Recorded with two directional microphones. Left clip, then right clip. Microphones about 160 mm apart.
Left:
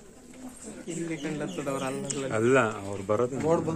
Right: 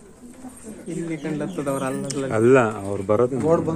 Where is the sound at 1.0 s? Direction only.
20° right (ahead or behind).